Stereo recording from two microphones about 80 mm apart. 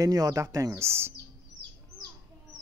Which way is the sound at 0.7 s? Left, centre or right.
Right.